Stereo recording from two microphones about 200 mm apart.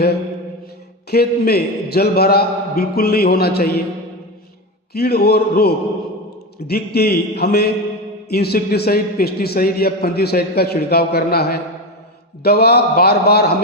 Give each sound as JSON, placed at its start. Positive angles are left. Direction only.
{"t": 1.1, "sound": "a man's voice", "side_deg": 55}
{"t": 4.9, "sound": "a man's voice", "side_deg": 50}